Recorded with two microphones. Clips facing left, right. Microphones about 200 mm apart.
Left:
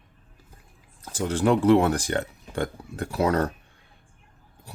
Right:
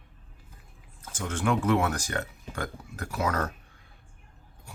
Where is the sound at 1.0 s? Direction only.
35° left (ahead or behind).